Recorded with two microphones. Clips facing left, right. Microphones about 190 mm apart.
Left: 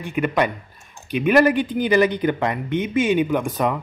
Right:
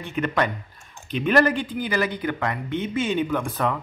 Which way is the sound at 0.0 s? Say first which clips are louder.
Left 3 dB; 10° left (ahead or behind).